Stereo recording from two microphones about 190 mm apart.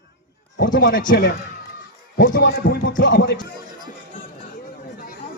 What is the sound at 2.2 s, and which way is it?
Speech, 75° left (ahead or behind).